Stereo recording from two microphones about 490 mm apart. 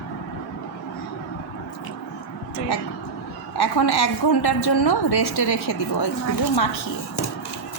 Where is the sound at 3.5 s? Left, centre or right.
Left.